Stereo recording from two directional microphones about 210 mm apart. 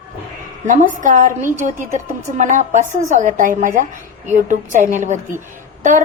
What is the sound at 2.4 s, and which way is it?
A woman's voice, 35° right (ahead or behind).